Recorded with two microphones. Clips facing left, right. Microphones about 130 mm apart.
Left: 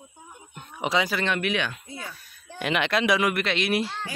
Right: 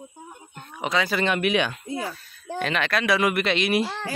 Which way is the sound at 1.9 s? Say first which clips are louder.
Right 9 dB; 90° right.